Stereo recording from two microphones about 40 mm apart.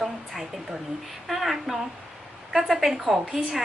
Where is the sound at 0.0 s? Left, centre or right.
Centre.